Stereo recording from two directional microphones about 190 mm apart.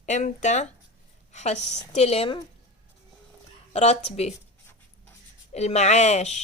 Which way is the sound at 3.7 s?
35° left (ahead or behind).